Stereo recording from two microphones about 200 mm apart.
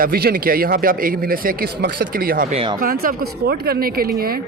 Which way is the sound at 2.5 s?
25° right (ahead or behind).